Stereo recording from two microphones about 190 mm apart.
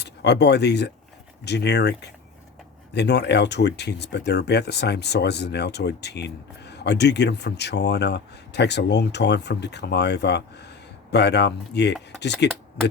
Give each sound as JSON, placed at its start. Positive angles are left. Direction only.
{"t": 0.0, "sound": "speech", "side_deg": 60}